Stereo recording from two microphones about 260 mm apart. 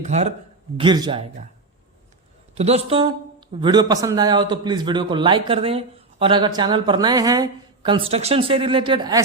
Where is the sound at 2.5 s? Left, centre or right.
Right.